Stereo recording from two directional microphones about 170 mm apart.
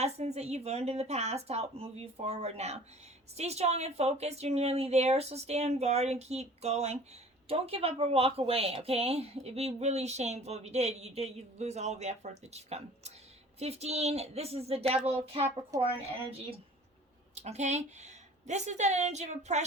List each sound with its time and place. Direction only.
0.0 s speech: 40° right (ahead or behind)
15.7 s speech: 20° right (ahead or behind)
17.3 s speech: 40° right (ahead or behind)